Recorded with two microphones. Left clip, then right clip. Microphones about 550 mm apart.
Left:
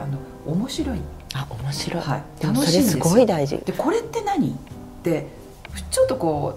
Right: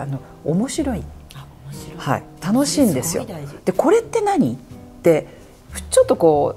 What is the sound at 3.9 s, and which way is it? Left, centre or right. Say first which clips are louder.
Speech: right 6 dB; right.